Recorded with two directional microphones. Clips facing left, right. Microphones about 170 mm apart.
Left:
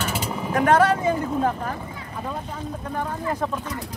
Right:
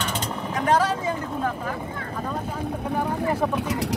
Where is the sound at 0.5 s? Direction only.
55° left (ahead or behind).